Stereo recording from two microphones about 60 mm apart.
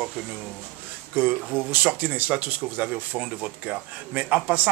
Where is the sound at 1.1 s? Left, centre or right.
Right.